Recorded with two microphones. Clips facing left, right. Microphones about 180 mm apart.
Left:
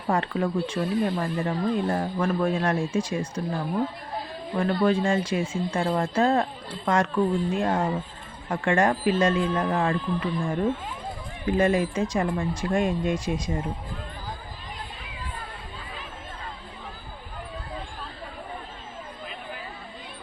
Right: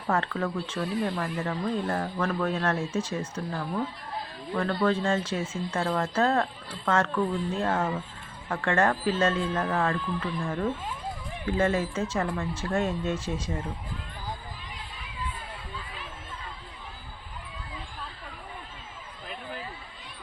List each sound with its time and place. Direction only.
0.1 s speech: 15° left (ahead or behind)
4.5 s speech: 15° left (ahead or behind)